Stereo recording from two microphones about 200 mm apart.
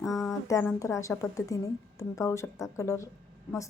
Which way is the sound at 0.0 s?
15° left (ahead or behind).